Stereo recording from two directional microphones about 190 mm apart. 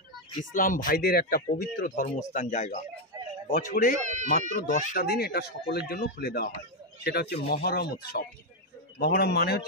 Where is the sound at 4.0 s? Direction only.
40° right (ahead or behind).